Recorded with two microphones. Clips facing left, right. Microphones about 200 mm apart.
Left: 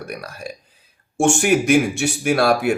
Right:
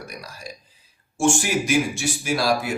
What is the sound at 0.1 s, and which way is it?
Speech, 60° left (ahead or behind).